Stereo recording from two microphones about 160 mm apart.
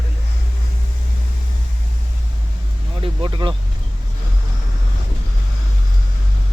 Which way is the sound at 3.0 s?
30° right (ahead or behind).